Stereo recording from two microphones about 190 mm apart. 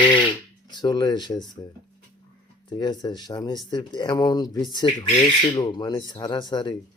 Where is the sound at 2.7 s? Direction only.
20° left (ahead or behind).